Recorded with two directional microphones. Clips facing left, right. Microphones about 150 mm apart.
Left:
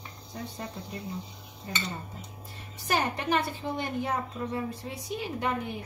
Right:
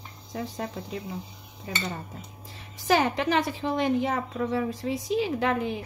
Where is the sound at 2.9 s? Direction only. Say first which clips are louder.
Right 5 dB; 90° right.